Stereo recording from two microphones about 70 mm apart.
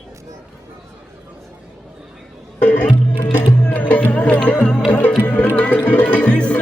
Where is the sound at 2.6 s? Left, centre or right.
Left.